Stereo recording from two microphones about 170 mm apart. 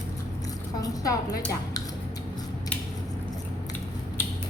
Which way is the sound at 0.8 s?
20° left (ahead or behind).